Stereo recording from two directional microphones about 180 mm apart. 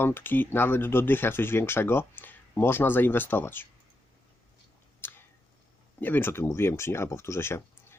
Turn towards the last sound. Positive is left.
turn(degrees=15)  # may be behind; listen again after turning